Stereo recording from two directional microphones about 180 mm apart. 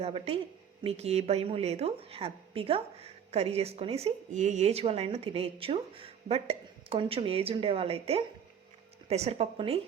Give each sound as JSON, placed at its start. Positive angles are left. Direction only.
{"t": 0.0, "sound": "a woman's voice", "side_deg": -35}